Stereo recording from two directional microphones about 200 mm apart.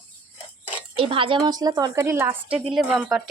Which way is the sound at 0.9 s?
25° right (ahead or behind).